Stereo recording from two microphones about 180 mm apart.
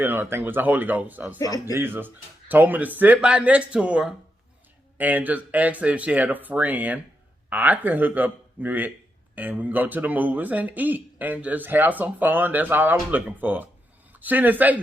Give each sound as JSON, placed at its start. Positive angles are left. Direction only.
{"t": 0.0, "sound": "a man's voice", "side_deg": -10}
{"t": 1.4, "sound": "speech", "side_deg": 20}
{"t": 1.7, "sound": "a man's voice", "side_deg": -10}